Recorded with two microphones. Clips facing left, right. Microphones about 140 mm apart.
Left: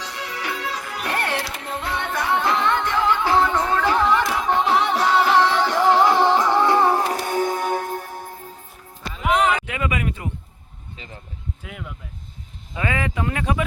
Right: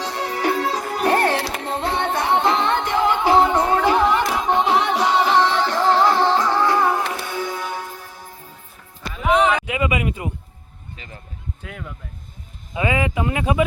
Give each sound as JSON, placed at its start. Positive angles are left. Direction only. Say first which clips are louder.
{"t": 0.0, "sound": "music", "louder": "right 7 dB", "side_deg": -30}
{"t": 0.3, "sound": "music", "louder": "right 8 dB", "side_deg": -40}
{"t": 4.5, "sound": "music", "louder": "right 1 dB", "side_deg": 0}
{"t": 9.2, "sound": "a sound", "louder": "right 2 dB", "side_deg": 0}
{"t": 9.6, "sound": "a sound", "louder": "right 3 dB", "side_deg": -10}
{"t": 11.6, "sound": "speech", "louder": "right 3 dB", "side_deg": 5}
{"t": 12.7, "sound": "speech", "louder": "right 4 dB", "side_deg": -10}